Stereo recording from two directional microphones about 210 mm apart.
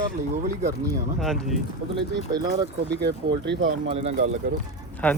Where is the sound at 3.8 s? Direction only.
30° right (ahead or behind).